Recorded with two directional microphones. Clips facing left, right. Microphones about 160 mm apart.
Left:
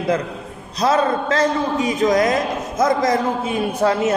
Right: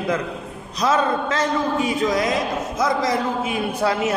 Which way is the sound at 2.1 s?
45° left (ahead or behind).